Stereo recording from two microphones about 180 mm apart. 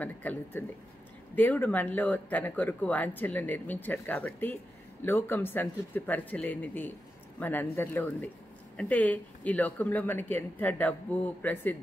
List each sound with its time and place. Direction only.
0.0 s speech: 10° left (ahead or behind)